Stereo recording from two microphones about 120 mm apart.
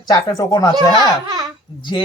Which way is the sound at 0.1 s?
30° left (ahead or behind).